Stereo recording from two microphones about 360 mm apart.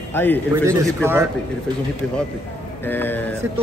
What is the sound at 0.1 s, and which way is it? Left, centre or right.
Speech, centre.